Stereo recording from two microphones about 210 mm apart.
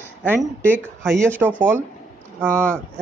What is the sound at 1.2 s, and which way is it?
Speech, 10° right (ahead or behind).